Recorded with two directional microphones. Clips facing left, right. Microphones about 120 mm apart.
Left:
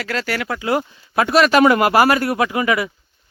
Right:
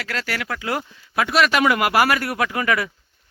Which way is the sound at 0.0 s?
30° left (ahead or behind).